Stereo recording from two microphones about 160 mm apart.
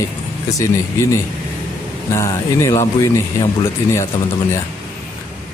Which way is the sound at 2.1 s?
20° left (ahead or behind).